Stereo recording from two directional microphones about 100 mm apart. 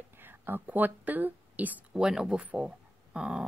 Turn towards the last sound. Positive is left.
turn(degrees=-10)  # may be behind; listen again after turning